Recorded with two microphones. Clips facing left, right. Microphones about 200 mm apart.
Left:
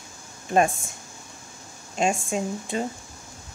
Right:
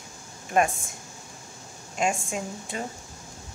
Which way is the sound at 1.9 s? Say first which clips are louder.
Left 3 dB; 25° left (ahead or behind).